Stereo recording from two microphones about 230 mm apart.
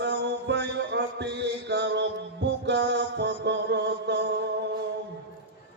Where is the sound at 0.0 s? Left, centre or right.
Right.